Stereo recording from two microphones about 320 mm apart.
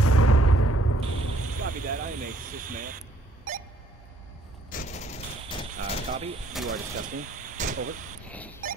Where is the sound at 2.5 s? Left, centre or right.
Right.